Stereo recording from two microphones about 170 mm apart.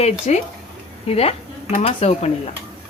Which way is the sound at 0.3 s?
40° left (ahead or behind).